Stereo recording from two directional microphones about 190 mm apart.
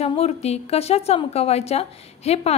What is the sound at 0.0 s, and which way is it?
A woman's voice, 35° left (ahead or behind).